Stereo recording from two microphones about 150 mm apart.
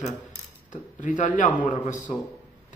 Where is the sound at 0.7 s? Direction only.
60° left (ahead or behind).